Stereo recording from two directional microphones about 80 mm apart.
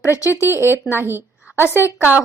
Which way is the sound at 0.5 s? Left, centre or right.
Right.